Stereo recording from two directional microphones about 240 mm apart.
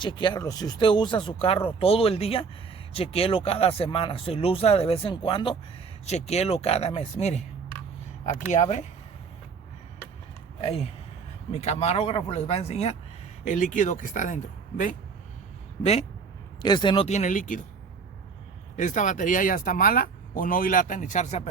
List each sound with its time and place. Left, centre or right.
0.0 s speech: centre
8.5 s speech: left
10.6 s speech: left
15.8 s speech: left
18.8 s speech: left